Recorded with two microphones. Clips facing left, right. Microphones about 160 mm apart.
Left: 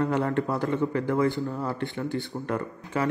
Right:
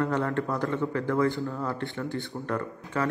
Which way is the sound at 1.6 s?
Centre (ahead or behind).